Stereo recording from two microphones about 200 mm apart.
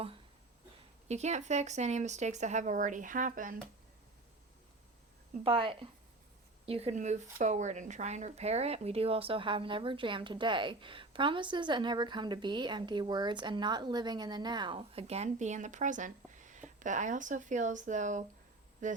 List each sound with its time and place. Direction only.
1.0 s speech: 35° right (ahead or behind)
5.3 s speech: 30° right (ahead or behind)